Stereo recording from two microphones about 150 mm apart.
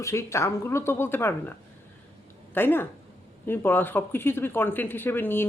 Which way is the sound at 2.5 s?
15° left (ahead or behind).